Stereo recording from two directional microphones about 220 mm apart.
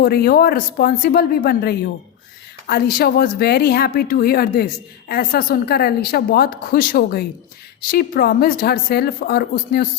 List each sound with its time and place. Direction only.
0.0 s speech: 45° left (ahead or behind)